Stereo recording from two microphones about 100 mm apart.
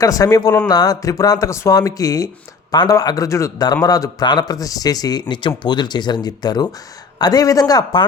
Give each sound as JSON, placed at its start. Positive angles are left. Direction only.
{"t": 0.0, "sound": "speech", "side_deg": 35}
{"t": 5.3, "sound": "speech", "side_deg": 50}